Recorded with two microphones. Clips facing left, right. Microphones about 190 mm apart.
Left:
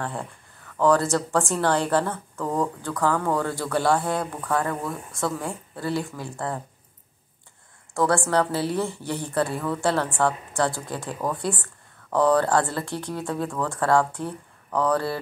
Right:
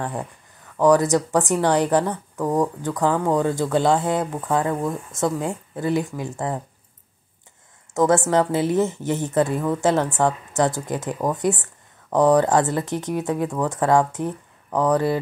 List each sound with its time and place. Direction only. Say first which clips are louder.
0.0 s a woman's voice: right 3 dB; 15° right (ahead or behind)
7.9 s a woman's voice: right 4 dB; 20° right (ahead or behind)